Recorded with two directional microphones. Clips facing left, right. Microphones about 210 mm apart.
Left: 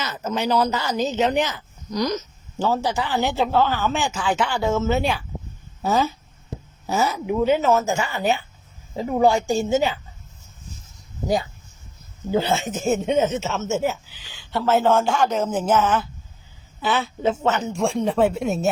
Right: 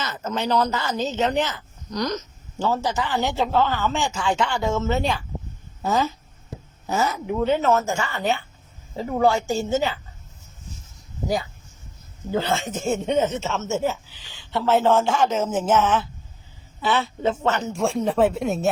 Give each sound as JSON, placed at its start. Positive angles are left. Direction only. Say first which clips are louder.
{"t": 0.0, "sound": "speech", "louder": "left 2 dB", "side_deg": 10}
{"t": 12.3, "sound": "speech", "louder": "left 2 dB", "side_deg": 10}